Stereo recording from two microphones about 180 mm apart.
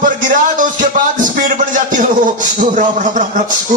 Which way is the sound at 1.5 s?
45° right (ahead or behind).